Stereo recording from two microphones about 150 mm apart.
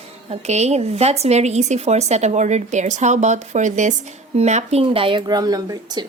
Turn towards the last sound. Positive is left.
turn(degrees=-25)  # may be behind; listen again after turning